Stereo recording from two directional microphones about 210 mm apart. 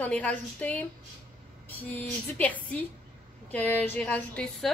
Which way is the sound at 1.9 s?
5° left (ahead or behind).